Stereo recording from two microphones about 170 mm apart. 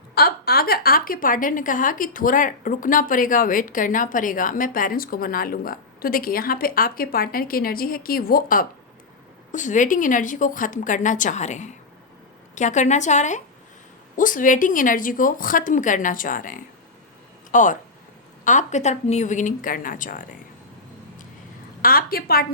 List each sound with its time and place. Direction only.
0.1 s a woman's voice: 65° left (ahead or behind)
21.8 s a woman's voice: 60° left (ahead or behind)